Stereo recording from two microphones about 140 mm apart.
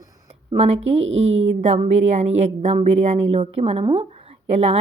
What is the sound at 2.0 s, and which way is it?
A woman's voice, 50° right (ahead or behind).